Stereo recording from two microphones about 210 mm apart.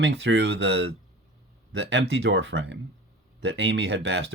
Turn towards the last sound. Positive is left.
turn(degrees=-55)  # may be behind; listen again after turning